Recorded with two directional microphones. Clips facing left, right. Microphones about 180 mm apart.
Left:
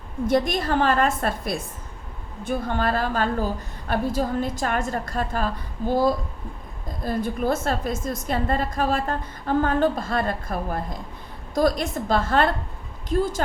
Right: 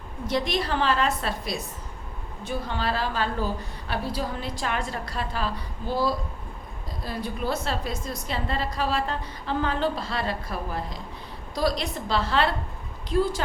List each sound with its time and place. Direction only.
0.3 s a woman's voice: 50° left (ahead or behind)